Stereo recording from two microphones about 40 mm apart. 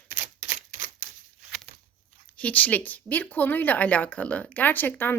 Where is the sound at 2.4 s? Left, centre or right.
Left.